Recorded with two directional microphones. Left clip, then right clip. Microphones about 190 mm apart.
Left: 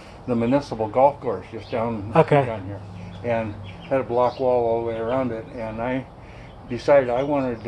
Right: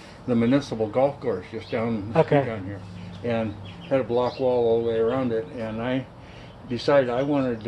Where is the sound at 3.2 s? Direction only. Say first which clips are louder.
Left 2 dB; 45° right (ahead or behind).